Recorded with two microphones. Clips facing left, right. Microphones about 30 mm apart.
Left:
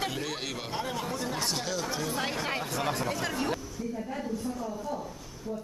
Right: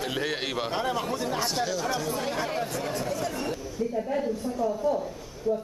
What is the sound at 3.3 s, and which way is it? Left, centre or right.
Speech, centre.